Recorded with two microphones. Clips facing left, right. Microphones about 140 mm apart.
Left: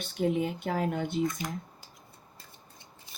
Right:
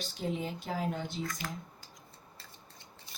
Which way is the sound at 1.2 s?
20° left (ahead or behind).